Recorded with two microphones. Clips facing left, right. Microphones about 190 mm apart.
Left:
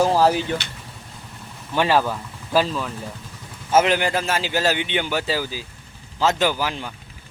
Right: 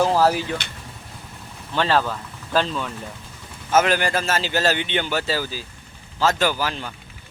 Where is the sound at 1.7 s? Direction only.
10° left (ahead or behind).